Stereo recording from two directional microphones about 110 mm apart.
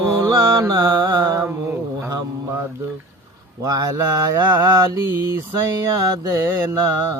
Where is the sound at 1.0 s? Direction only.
40° right (ahead or behind).